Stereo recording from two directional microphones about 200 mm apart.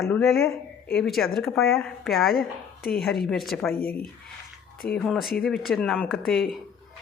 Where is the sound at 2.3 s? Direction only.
50° left (ahead or behind).